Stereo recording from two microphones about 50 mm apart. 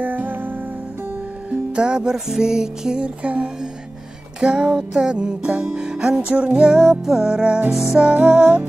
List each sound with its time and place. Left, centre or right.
0.0 s music: right
1.8 s music: centre
6.8 s music: centre
8.0 s music: right